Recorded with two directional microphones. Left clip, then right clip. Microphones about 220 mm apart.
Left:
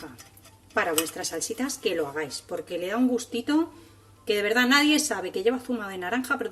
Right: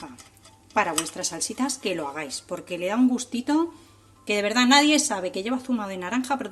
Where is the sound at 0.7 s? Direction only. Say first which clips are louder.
Right 1 dB; 30° right (ahead or behind).